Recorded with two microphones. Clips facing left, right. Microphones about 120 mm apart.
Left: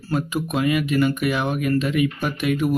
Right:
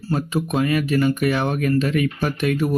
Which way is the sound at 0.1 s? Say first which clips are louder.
Right 1 dB; 35° right (ahead or behind).